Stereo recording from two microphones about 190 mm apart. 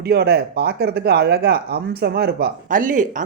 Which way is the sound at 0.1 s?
55° right (ahead or behind).